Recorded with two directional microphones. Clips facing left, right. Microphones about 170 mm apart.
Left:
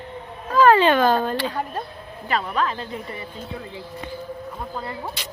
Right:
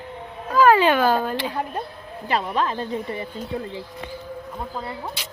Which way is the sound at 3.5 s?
45° right (ahead or behind).